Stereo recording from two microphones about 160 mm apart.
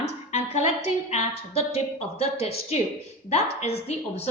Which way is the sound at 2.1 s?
40° left (ahead or behind).